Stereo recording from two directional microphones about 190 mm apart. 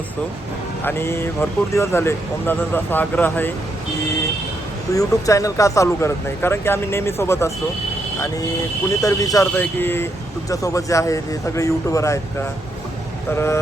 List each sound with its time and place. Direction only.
0.9 s speech: 10° left (ahead or behind)
4.9 s speech: 15° left (ahead or behind)
8.9 s speech: 20° left (ahead or behind)